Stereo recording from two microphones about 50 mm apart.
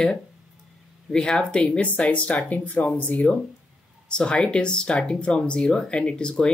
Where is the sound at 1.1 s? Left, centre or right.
Centre.